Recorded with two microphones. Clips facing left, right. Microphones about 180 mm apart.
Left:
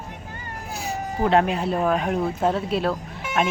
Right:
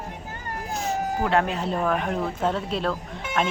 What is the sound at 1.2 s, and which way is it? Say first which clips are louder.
Speech: left 5 dB; 20° left (ahead or behind).